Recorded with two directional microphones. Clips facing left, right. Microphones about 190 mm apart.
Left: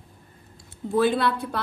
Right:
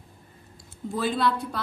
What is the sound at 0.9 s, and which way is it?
Speech, 60° left (ahead or behind).